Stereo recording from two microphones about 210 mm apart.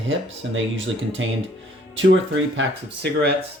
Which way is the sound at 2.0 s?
60° right (ahead or behind).